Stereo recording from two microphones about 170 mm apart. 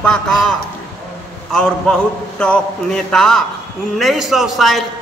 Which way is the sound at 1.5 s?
5° left (ahead or behind).